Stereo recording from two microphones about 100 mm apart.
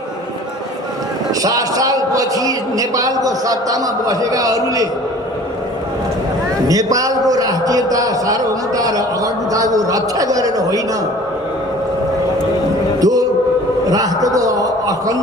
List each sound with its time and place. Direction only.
1.4 s a man's voice: 35° right (ahead or behind)
6.7 s a man's voice: 35° right (ahead or behind)
13.0 s chant: 35° right (ahead or behind)
13.9 s a man's voice: 35° right (ahead or behind)